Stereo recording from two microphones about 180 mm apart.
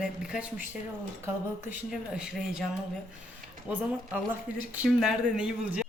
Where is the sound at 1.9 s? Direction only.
5° right (ahead or behind).